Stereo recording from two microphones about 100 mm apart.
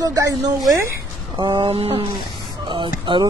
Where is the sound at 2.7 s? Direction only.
50° right (ahead or behind).